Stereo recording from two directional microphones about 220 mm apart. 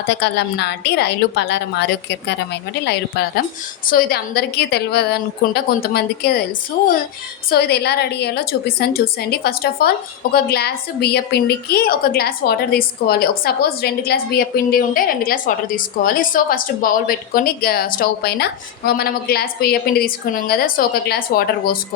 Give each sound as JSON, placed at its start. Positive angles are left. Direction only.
{"t": 0.2, "sound": "a woman's voice", "side_deg": 50}
{"t": 7.5, "sound": "a woman's voice", "side_deg": 45}